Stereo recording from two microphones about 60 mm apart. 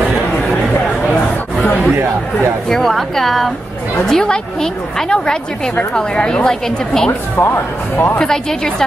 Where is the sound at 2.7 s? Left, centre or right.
Centre.